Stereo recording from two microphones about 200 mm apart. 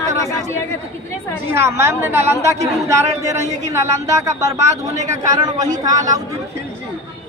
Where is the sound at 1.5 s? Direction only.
15° right (ahead or behind).